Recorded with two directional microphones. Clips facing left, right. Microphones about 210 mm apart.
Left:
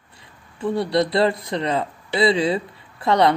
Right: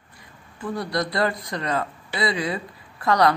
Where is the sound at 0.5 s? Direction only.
25° left (ahead or behind).